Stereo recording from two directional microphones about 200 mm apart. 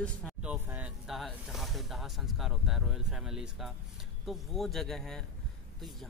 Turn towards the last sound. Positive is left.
turn(degrees=0)  # may be behind; listen again after turning